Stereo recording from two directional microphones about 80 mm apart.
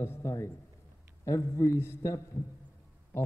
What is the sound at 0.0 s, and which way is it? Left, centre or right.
A man's voice, left.